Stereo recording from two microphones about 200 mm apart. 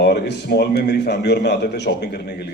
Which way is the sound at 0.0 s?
60° left (ahead or behind).